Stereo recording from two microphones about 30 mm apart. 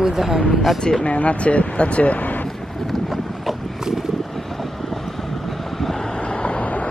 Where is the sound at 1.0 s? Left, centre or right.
Left.